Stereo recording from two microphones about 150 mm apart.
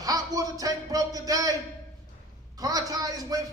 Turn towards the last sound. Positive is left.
turn(degrees=-25)  # may be behind; listen again after turning